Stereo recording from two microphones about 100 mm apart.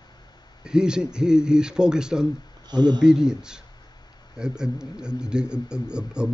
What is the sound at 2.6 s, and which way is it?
Speech, 45° right (ahead or behind).